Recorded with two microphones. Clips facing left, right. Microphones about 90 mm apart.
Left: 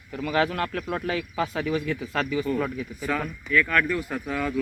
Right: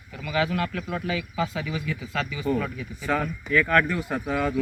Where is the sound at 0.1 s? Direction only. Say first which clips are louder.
Left 2 dB; 45° left (ahead or behind).